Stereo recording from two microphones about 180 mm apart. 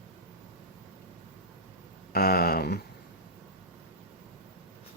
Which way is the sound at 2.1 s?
55° left (ahead or behind).